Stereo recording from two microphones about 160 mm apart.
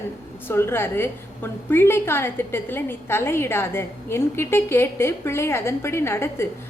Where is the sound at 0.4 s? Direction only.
15° left (ahead or behind).